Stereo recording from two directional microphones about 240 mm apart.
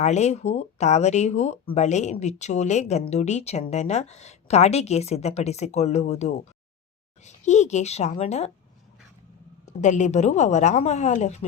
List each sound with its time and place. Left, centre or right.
0.0 s speech: left
9.8 s speech: left